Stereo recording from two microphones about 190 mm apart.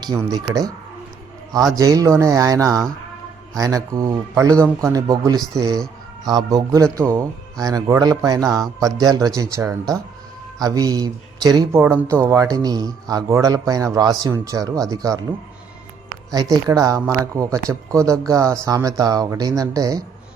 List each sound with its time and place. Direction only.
0.0 s speech: 20° right (ahead or behind)
1.7 s speech: 20° right (ahead or behind)
16.3 s speech: 20° right (ahead or behind)